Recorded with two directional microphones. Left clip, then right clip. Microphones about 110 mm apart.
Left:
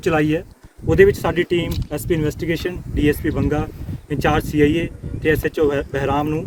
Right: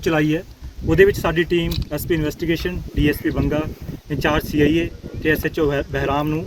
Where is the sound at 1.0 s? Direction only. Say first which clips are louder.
Left 1 dB; 30° left (ahead or behind).